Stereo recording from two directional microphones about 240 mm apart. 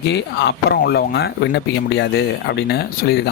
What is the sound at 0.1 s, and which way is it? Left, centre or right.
Speech, left.